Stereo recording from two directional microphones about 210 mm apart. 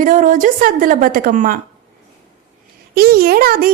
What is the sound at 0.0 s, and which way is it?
A woman's voice, 40° right (ahead or behind).